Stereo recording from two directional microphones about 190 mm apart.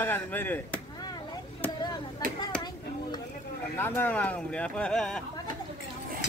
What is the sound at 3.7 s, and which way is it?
Speech, 10° left (ahead or behind).